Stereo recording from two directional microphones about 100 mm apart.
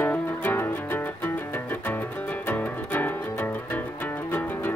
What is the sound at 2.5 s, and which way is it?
Music, 15° left (ahead or behind).